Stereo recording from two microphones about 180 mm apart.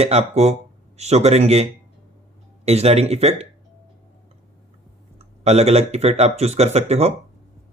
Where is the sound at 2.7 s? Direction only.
35° right (ahead or behind).